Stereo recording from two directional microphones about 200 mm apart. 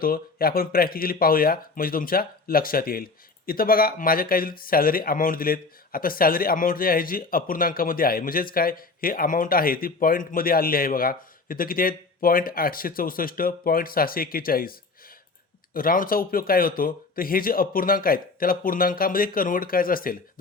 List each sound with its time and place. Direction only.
0.0 s speech: 50° left (ahead or behind)